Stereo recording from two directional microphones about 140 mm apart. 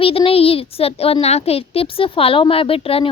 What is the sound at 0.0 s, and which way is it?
A child's voice, 40° left (ahead or behind).